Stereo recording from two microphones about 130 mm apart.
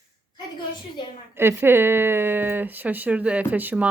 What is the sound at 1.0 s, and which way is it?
Speech, 35° left (ahead or behind).